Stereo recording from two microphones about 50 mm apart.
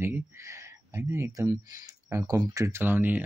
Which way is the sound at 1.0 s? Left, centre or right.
Right.